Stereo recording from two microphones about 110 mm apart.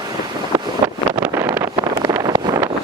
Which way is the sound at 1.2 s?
15° right (ahead or behind).